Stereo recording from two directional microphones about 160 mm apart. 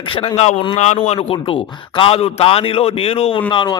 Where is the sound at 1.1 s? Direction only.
35° left (ahead or behind).